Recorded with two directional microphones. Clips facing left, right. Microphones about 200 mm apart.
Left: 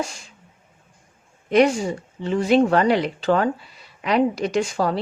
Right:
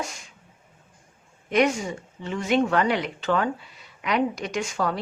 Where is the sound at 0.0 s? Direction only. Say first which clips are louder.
Left 5 dB; 30° left (ahead or behind).